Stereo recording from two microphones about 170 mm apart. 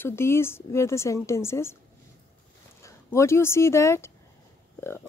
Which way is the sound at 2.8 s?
15° left (ahead or behind).